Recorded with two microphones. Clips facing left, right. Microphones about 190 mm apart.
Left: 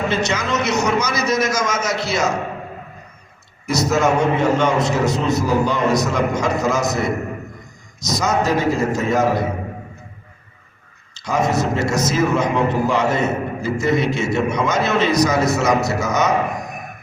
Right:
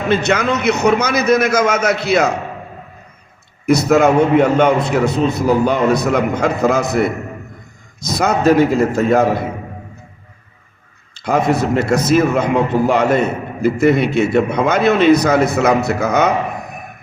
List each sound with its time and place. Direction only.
0.1 s a man's voice: 60° right (ahead or behind)
3.7 s a man's voice: 60° right (ahead or behind)
8.0 s a man's voice: 60° right (ahead or behind)
11.2 s a man's voice: 60° right (ahead or behind)